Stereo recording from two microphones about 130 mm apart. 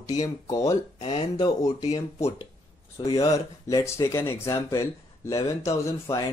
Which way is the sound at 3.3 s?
25° left (ahead or behind).